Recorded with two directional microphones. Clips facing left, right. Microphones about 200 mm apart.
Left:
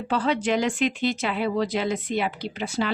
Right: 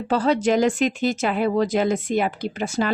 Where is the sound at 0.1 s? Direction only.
40° right (ahead or behind).